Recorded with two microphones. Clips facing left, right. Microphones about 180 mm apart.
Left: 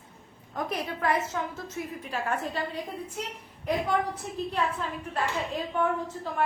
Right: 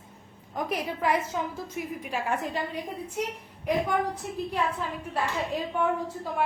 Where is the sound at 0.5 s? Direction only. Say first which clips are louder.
Right 1 dB; 15° right (ahead or behind).